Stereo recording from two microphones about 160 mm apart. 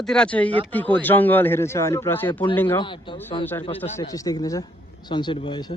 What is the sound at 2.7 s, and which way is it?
Speech, 30° left (ahead or behind).